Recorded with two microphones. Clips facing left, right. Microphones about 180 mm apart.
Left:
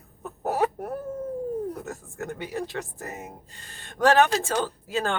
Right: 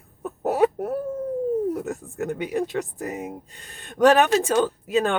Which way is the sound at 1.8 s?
15° right (ahead or behind).